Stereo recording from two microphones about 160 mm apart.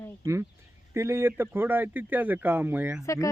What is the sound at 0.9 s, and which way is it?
Speech, 15° right (ahead or behind).